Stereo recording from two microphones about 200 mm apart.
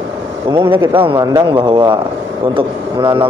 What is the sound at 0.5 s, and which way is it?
A man's voice, 25° right (ahead or behind).